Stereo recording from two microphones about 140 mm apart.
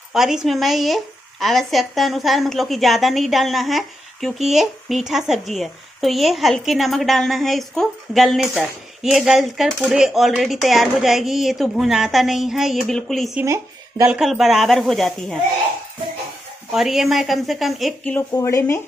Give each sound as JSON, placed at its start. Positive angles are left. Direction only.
{"t": 0.1, "sound": "speech", "side_deg": -5}
{"t": 13.4, "sound": "speech", "side_deg": -20}
{"t": 14.1, "sound": "speech", "side_deg": 0}
{"t": 16.7, "sound": "speech", "side_deg": 0}
{"t": 18.3, "sound": "speech", "side_deg": 20}